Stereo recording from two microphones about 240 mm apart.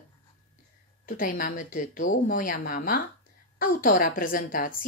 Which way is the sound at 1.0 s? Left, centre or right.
Left.